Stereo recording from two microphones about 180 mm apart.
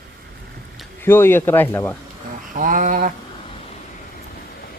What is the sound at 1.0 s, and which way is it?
Speech, 15° left (ahead or behind).